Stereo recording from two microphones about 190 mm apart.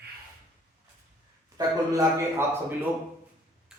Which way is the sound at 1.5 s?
20° right (ahead or behind).